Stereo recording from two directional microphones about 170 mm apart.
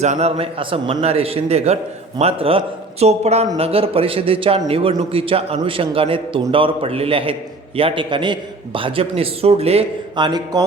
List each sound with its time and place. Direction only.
0.0 s a man's voice: 40° right (ahead or behind); by 10.7 s 25° right (ahead or behind)